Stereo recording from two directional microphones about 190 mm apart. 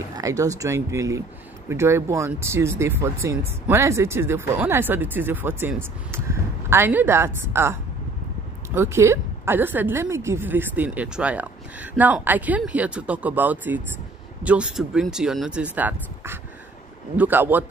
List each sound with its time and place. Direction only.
0.1 s speech: 15° right (ahead or behind)